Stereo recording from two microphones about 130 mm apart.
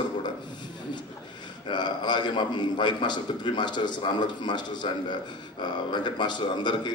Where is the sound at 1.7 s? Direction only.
35° left (ahead or behind).